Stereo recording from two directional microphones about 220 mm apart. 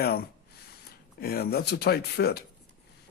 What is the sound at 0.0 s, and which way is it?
Speech, 45° left (ahead or behind).